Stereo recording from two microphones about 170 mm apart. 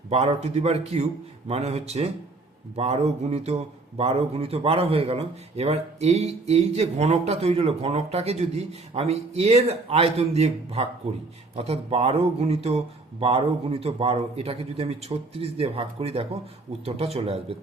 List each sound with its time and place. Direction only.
0.1 s a man's voice: 40° right (ahead or behind)